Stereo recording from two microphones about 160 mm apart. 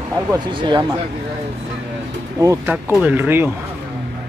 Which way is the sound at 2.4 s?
15° right (ahead or behind).